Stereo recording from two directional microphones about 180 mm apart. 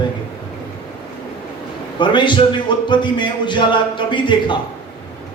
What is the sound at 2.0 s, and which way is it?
A man's voice, 25° left (ahead or behind).